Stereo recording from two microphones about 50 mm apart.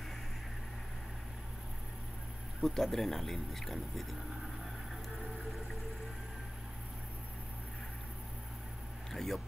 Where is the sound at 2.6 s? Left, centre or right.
Centre.